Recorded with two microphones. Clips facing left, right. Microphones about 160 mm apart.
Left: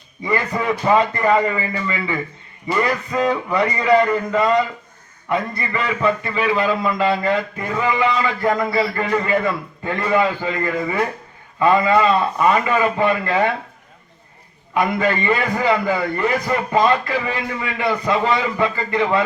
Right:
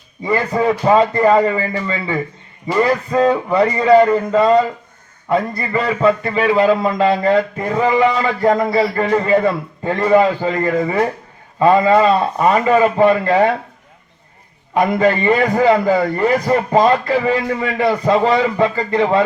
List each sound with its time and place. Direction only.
0.3 s a man's voice: 30° right (ahead or behind)
2.7 s a sound: 30° right (ahead or behind)
5.3 s a man's voice: 35° right (ahead or behind)
14.7 s a man's voice: 35° right (ahead or behind)